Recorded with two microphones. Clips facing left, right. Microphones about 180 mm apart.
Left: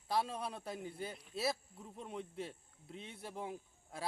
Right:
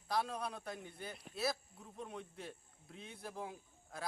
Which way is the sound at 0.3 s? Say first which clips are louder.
Left 1 dB; 30° left (ahead or behind).